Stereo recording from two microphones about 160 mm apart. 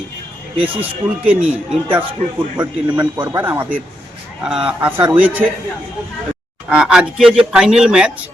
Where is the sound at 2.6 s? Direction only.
30° right (ahead or behind).